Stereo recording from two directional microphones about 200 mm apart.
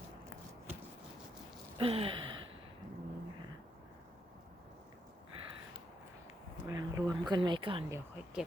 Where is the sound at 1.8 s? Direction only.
25° right (ahead or behind).